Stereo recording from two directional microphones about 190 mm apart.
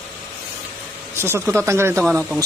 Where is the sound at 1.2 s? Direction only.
15° right (ahead or behind).